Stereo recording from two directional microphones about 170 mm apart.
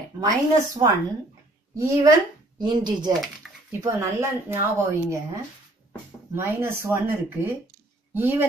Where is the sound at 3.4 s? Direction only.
5° right (ahead or behind).